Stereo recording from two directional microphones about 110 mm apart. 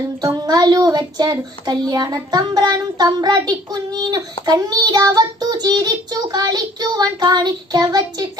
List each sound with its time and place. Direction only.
0.5 s speech: 40° right (ahead or behind)